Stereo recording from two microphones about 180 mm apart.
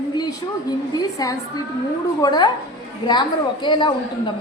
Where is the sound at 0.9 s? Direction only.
20° left (ahead or behind).